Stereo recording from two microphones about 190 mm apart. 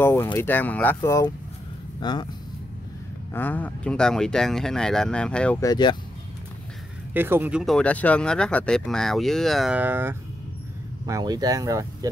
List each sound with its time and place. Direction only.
0.0 s speech: 10° left (ahead or behind)
3.3 s speech: 10° left (ahead or behind)
5.6 s speech: 20° left (ahead or behind)
7.2 s speech: 10° right (ahead or behind)